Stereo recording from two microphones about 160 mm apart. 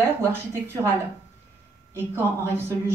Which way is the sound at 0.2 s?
15° right (ahead or behind).